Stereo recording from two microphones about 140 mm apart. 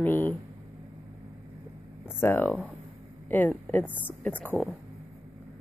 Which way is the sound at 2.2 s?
15° left (ahead or behind).